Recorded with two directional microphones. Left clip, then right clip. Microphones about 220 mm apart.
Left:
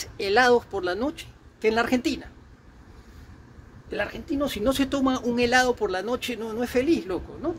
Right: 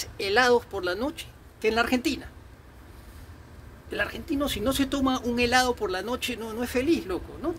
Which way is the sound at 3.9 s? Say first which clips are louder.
Even; 10° right (ahead or behind).